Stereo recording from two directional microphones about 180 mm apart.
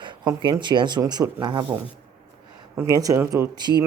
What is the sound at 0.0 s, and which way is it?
Speech, 25° right (ahead or behind).